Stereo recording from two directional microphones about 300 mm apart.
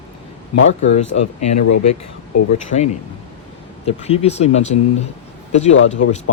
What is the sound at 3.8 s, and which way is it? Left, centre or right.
Speech, left.